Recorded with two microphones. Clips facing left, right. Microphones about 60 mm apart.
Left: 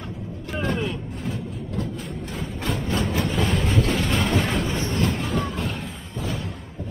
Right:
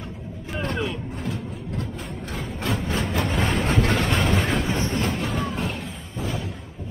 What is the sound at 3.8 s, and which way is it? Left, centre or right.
Train, right.